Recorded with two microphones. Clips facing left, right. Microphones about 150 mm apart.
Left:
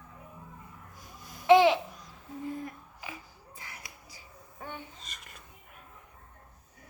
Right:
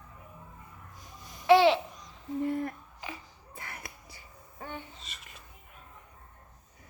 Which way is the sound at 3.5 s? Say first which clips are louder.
Right 5 dB; 60° right (ahead or behind).